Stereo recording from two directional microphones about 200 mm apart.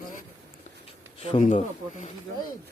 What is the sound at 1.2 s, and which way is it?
Speech, 35° left (ahead or behind).